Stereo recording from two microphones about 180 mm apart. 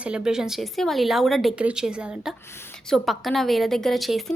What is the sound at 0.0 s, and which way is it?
A woman's voice, 5° right (ahead or behind).